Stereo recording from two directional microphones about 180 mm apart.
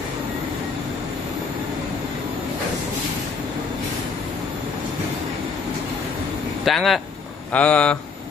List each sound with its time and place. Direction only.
6.6 s speech: centre (ahead or behind)